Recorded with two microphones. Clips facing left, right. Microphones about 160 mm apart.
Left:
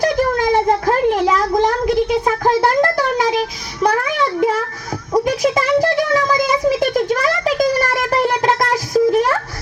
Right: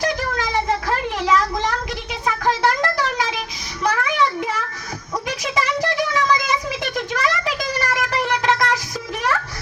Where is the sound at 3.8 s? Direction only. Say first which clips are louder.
Left 3 dB; 40° left (ahead or behind).